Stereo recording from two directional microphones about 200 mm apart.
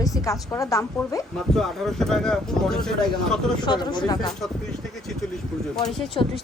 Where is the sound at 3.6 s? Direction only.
20° left (ahead or behind).